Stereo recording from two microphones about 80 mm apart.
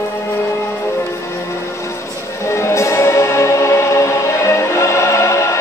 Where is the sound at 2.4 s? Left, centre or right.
Left.